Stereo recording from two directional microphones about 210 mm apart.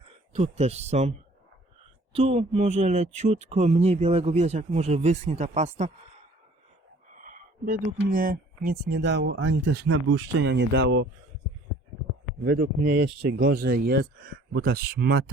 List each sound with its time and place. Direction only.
0.0 s speech: 30° right (ahead or behind)
2.1 s speech: 30° right (ahead or behind)
7.1 s speech: 40° right (ahead or behind); by 11.1 s 55° right (ahead or behind)
12.4 s speech: 45° right (ahead or behind)